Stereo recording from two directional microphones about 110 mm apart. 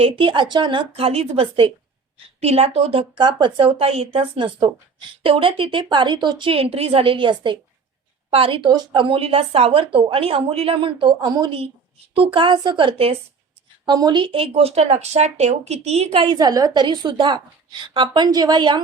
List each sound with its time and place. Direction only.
0.0 s speech: 50° right (ahead or behind)
2.1 s speech: 70° right (ahead or behind); by 11.5 s 40° right (ahead or behind)
12.1 s speech: 55° right (ahead or behind)
13.8 s speech: 40° right (ahead or behind)
16.4 s speech: 35° right (ahead or behind)